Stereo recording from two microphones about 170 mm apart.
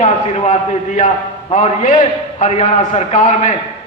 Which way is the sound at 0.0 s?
40° left (ahead or behind).